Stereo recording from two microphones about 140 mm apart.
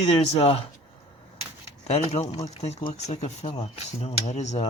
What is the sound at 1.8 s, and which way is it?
Speech, 50° left (ahead or behind).